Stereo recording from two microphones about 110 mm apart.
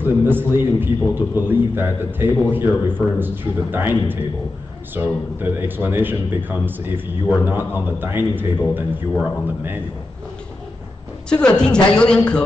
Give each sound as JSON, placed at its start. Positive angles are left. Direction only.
{"t": 0.0, "sound": "a man's voice", "side_deg": -20}
{"t": 11.2, "sound": "a woman's voice", "side_deg": 10}